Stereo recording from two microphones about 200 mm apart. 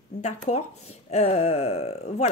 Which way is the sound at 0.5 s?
35° left (ahead or behind).